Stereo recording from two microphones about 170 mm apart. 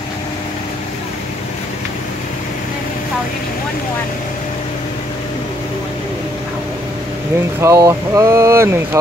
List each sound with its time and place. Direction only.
7.6 s speech: 20° right (ahead or behind)